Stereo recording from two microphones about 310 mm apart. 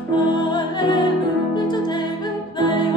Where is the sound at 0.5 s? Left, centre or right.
Centre.